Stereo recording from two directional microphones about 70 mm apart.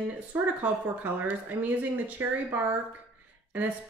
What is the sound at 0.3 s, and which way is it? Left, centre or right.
Speech, right.